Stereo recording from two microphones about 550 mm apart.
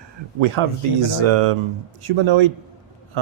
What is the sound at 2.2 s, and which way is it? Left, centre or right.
Speech, right.